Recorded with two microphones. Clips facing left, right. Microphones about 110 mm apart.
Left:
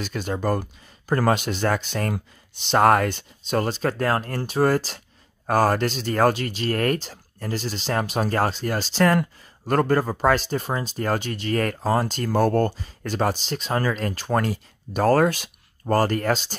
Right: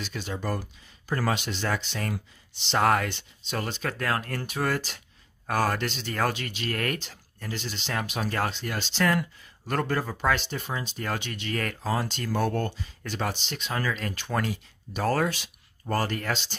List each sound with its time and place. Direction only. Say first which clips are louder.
0.0 s speech: left 7 dB; 50° left (ahead or behind)